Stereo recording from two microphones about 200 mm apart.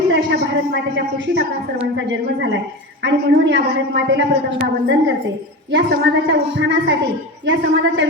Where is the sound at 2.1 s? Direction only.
60° right (ahead or behind).